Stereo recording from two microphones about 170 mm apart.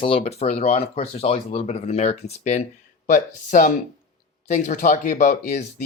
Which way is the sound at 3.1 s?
50° left (ahead or behind).